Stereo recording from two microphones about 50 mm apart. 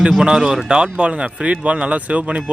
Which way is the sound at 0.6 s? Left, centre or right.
Centre.